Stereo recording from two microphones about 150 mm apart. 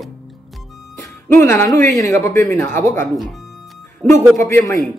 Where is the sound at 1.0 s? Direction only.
15° left (ahead or behind).